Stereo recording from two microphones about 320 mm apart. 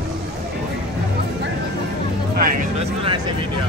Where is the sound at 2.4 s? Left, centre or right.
Right.